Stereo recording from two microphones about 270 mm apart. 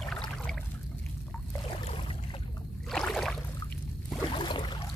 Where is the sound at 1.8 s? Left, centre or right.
Centre.